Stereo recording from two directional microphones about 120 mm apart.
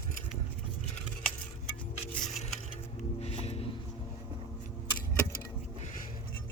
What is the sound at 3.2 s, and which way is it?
Music, 60° left (ahead or behind).